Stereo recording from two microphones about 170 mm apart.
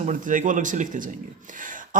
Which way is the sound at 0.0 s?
50° right (ahead or behind).